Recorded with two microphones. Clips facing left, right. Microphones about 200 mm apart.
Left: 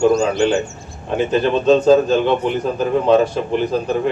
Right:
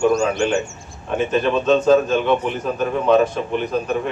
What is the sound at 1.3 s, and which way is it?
A man's voice, 35° left (ahead or behind).